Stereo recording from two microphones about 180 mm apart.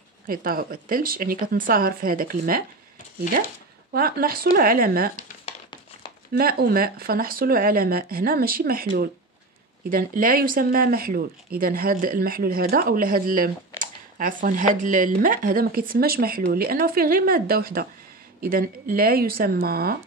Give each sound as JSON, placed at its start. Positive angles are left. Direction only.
{"t": 0.3, "sound": "speech", "side_deg": -55}
{"t": 3.9, "sound": "speech", "side_deg": -55}
{"t": 6.3, "sound": "speech", "side_deg": -55}